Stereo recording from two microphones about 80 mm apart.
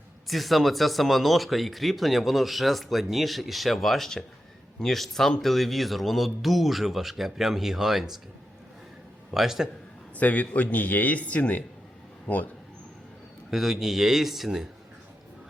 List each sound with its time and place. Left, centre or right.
0.3 s speech: centre
9.3 s speech: centre
10.2 s a man's voice: centre
13.5 s speech: centre